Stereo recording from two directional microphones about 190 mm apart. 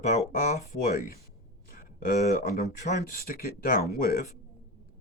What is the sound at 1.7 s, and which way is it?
Speech, 50° left (ahead or behind).